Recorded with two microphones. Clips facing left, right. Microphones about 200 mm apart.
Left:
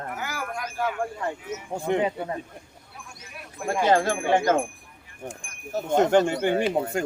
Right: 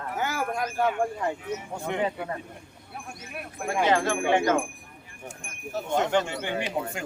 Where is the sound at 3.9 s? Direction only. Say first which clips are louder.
Left 3 dB; 40° left (ahead or behind).